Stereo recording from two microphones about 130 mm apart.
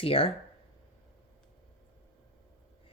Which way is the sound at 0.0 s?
45° left (ahead or behind).